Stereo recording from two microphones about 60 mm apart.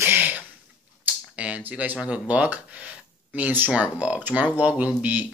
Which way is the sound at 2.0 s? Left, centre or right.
Right.